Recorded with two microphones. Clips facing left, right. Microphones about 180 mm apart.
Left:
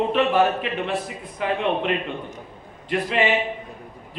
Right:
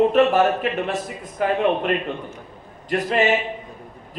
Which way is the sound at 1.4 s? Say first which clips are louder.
Right 3 dB; 45° right (ahead or behind).